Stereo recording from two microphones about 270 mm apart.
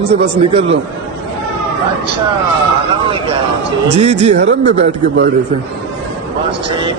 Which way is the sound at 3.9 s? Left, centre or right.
Right.